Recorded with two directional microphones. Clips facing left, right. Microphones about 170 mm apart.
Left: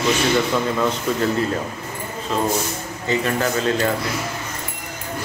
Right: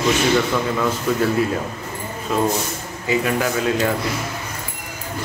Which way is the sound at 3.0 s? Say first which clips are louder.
Right 1 dB; 10° right (ahead or behind).